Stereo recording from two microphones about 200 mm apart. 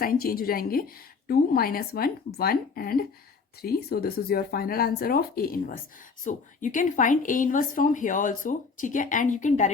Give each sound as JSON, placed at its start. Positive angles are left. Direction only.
{"t": 0.0, "sound": "speech", "side_deg": 45}